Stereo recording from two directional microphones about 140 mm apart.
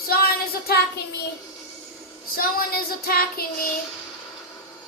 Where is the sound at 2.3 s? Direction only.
90° left.